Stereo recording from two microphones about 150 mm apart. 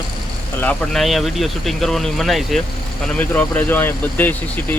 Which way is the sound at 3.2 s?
10° left (ahead or behind).